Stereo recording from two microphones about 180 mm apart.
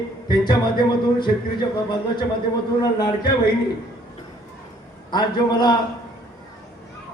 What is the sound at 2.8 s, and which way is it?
Speech, 20° left (ahead or behind).